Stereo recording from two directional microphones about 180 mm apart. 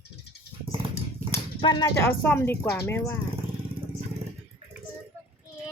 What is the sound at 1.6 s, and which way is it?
Speech, 25° left (ahead or behind).